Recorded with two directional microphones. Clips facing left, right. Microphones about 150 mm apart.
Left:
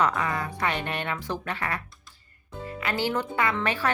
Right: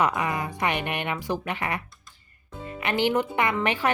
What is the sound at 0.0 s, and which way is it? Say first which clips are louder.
Speech: right 1 dB; 15° right (ahead or behind).